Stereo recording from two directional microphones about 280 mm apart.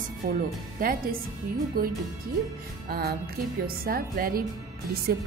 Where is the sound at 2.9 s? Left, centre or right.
Right.